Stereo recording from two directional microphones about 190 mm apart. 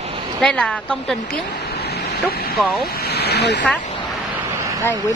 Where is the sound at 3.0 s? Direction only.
55° left (ahead or behind).